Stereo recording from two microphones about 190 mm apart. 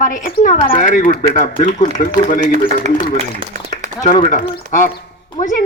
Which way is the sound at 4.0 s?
40° left (ahead or behind).